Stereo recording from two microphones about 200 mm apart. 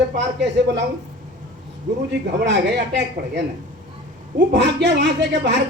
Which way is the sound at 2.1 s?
60° right (ahead or behind).